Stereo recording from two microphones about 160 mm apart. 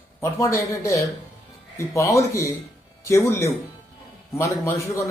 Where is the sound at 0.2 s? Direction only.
15° left (ahead or behind).